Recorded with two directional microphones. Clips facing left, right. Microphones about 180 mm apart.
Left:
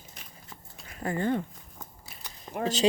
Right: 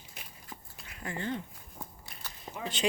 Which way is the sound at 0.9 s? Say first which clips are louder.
Left 8 dB; 40° left (ahead or behind).